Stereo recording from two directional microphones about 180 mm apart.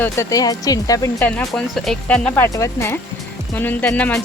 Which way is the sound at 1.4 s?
Centre (ahead or behind).